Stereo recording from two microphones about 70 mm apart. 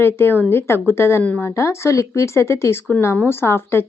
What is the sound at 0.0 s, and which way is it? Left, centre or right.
A woman's voice, left.